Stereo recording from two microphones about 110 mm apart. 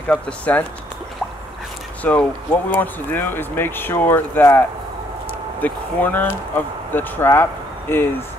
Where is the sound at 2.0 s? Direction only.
15° left (ahead or behind).